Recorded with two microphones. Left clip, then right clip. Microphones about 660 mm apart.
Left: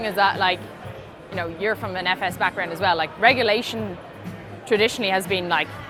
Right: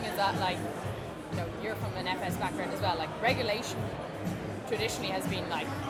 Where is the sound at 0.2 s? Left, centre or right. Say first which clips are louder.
Left 11 dB; left.